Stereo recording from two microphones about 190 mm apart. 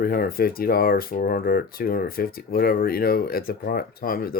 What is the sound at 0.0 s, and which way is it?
Speech, 50° left (ahead or behind).